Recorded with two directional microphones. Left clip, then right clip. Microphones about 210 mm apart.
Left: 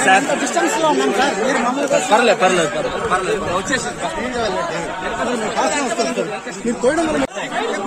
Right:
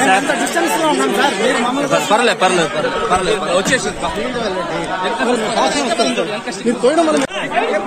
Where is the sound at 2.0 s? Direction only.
55° right (ahead or behind).